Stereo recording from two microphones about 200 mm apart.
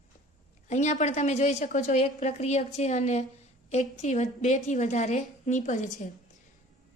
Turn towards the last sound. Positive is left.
turn(degrees=40)  # may be behind; listen again after turning